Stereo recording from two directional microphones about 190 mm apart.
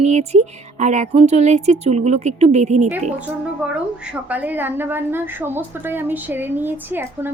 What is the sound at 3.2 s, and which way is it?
A woman's voice, 5° right (ahead or behind).